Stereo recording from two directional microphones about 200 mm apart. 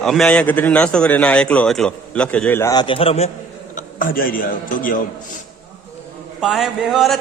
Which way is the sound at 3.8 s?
45° left (ahead or behind).